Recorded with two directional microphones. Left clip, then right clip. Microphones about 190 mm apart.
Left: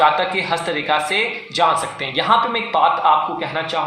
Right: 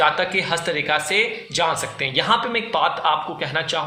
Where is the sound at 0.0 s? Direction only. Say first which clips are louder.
Left 3 dB; 30° right (ahead or behind).